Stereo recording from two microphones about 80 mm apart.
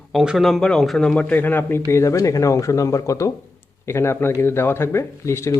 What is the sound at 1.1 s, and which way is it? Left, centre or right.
A man's voice, centre.